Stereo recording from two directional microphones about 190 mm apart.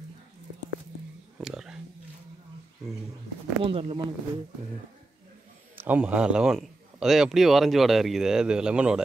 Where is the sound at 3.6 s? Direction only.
30° right (ahead or behind).